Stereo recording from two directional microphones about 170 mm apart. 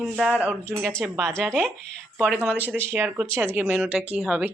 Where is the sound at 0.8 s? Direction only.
5° left (ahead or behind).